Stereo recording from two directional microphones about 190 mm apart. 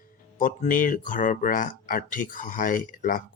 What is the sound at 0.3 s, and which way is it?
Speech, 45° left (ahead or behind).